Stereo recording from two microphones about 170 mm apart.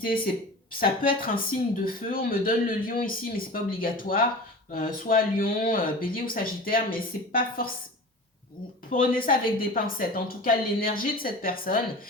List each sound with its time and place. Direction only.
0.8 s speech: 60° left (ahead or behind)
8.9 s speech: 55° left (ahead or behind)